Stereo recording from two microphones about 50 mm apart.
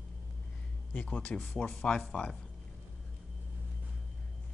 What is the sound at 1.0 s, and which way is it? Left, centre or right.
Speech, left.